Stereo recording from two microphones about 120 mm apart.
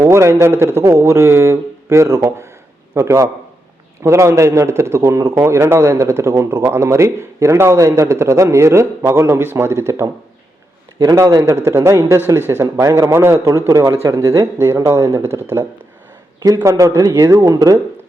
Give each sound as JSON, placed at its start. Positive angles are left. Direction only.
{"t": 0.0, "sound": "a man's voice", "side_deg": -25}
{"t": 16.6, "sound": "speech", "side_deg": -25}